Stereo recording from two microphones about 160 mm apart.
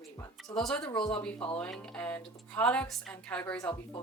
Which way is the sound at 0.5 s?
5° left (ahead or behind).